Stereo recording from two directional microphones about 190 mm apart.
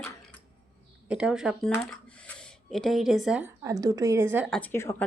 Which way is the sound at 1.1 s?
5° right (ahead or behind).